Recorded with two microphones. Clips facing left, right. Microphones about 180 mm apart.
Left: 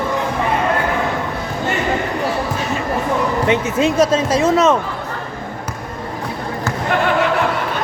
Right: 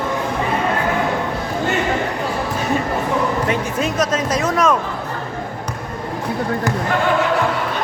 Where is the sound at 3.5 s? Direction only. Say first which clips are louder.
Left 4 dB; 25° left (ahead or behind).